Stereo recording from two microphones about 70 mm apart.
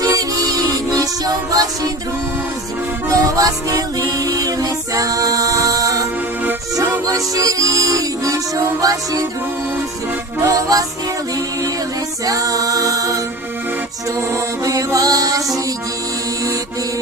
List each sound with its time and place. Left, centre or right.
0.1 s music: right
3.1 s music: right
7.1 s music: right
10.4 s music: right
12.2 s music: right
14.6 s music: right